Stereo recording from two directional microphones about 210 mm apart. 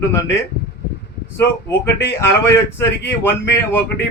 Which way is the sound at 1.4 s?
10° left (ahead or behind).